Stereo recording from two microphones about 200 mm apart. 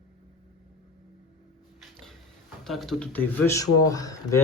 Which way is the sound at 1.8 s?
Centre (ahead or behind).